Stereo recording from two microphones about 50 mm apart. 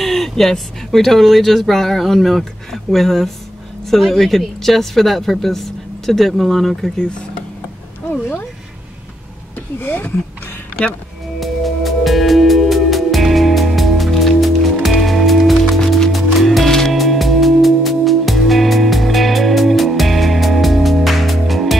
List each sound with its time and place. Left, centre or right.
0.0 s speech: centre
8.1 s speech: left
9.8 s speech: left
11.3 s music: centre